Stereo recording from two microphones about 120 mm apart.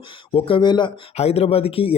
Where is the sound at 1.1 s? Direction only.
60° left (ahead or behind).